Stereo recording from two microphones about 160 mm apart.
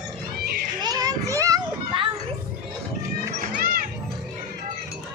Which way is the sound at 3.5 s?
65° right (ahead or behind).